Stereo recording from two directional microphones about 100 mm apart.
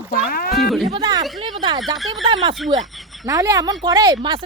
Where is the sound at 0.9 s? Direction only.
50° right (ahead or behind).